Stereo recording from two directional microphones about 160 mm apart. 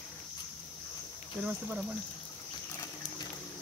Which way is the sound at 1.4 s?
5° right (ahead or behind).